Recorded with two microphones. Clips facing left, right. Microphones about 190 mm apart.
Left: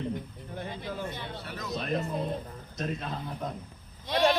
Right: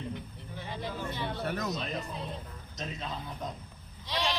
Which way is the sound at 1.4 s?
50° right (ahead or behind).